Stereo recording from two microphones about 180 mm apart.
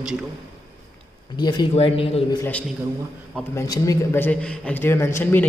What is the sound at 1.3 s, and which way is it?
Speech, 25° left (ahead or behind).